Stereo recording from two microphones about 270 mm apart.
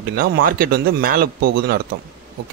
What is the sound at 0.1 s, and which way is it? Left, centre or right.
Speech, right.